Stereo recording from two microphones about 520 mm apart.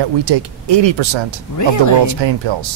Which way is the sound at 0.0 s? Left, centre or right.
Right.